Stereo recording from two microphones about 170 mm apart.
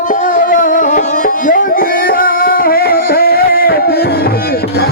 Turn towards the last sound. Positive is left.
turn(degrees=65)  # may be behind; listen again after turning